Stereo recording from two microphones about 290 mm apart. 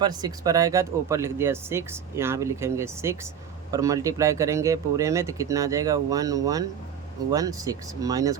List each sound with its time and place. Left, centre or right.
0.0 s speech: centre